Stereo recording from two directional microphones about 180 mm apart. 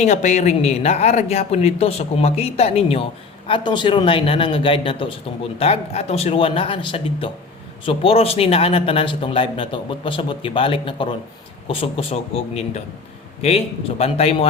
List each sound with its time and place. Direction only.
0.0 s a woman's voice: 40° left (ahead or behind)